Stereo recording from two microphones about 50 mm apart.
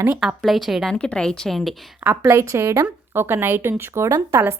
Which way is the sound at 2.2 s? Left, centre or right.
Right.